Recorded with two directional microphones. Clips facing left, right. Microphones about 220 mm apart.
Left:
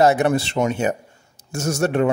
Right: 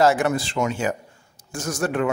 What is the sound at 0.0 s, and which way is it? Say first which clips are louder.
A man's voice: left 3 dB; 20° left (ahead or behind).